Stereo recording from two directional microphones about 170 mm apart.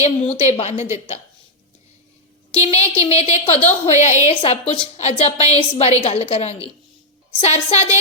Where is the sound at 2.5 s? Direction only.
35° left (ahead or behind).